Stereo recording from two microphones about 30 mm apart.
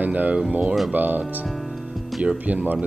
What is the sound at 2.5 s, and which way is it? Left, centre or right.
Speech, right.